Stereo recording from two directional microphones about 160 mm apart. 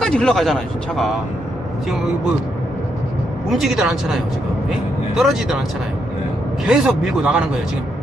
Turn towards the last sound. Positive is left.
turn(degrees=-5)  # may be behind; listen again after turning